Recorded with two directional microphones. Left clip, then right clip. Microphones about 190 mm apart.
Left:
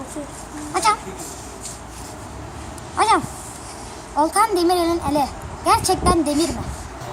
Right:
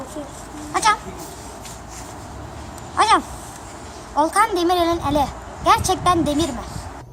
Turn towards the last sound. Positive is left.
turn(degrees=0)  # may be behind; listen again after turning